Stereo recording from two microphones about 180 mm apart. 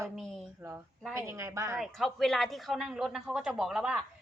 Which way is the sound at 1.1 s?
15° right (ahead or behind).